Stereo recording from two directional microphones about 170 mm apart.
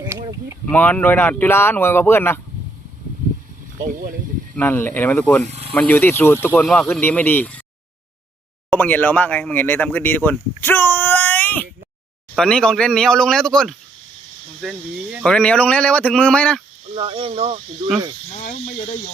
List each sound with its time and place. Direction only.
0.0 s a sound: 25° right (ahead or behind)
0.6 s speech: 10° left (ahead or behind)
3.8 s speech: 55° right (ahead or behind)
4.5 s speech: 10° left (ahead or behind)
5.5 s a sound: 35° right (ahead or behind)
5.7 s speech: 10° left (ahead or behind)
8.7 s speech: 10° left (ahead or behind)
16.9 s speech: 35° right (ahead or behind)
18.3 s cricket: 40° left (ahead or behind)